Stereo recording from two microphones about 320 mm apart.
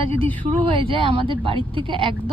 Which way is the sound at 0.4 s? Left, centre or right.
Centre.